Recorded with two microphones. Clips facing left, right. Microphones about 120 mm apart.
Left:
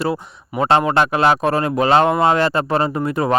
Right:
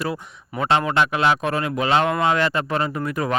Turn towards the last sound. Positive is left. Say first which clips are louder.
# left 5 dB
turn(degrees=30)  # may be behind; listen again after turning